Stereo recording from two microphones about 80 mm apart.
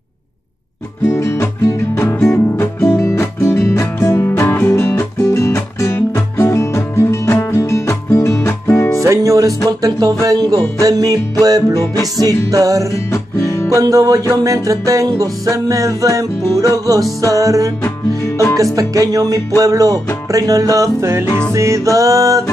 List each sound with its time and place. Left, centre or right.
1.0 s music: left
4.3 s music: left
9.1 s music: right
12.9 s music: left
13.7 s music: right
18.8 s music: right